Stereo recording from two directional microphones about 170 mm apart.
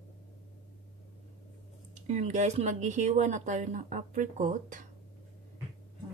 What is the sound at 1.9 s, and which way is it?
Speech, 40° right (ahead or behind).